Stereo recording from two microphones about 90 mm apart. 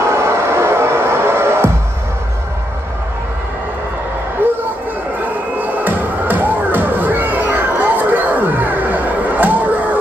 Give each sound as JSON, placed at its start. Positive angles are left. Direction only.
{"t": 0.0, "sound": "music", "side_deg": -30}
{"t": 4.4, "sound": "a sound", "side_deg": -20}
{"t": 5.2, "sound": "music", "side_deg": -20}